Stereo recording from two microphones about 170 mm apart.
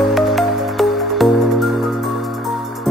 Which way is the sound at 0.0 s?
Centre (ahead or behind).